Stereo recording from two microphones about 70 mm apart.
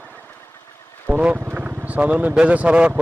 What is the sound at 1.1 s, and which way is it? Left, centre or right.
Speech, right.